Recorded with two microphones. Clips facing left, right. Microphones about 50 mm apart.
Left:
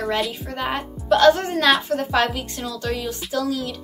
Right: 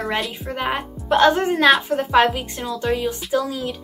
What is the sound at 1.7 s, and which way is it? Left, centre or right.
Speech, centre.